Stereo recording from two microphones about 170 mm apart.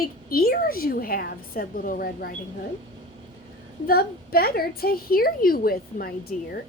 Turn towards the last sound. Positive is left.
turn(degrees=60)  # may be behind; listen again after turning